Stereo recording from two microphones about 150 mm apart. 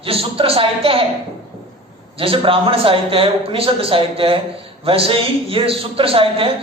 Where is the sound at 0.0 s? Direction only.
40° right (ahead or behind).